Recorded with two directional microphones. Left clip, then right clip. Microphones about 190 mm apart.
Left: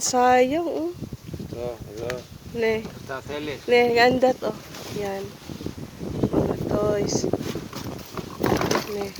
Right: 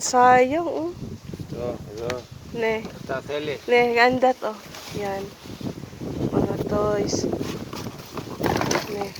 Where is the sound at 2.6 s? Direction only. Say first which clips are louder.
Left 1 dB; 35° left (ahead or behind).